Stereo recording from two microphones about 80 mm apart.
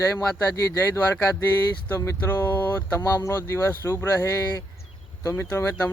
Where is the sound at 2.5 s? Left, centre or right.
Left.